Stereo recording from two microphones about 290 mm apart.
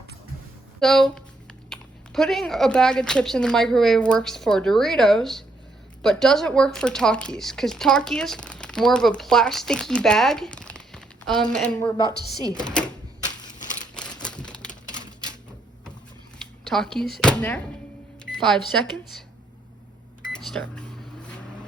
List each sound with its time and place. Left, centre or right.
0.8 s speech: centre
11.9 s a woman's voice: centre
12.6 s speech: centre
13.6 s a sound: left
14.2 s crumpling: centre
16.6 s speech: centre
18.3 s cash register: centre
20.3 s speech: centre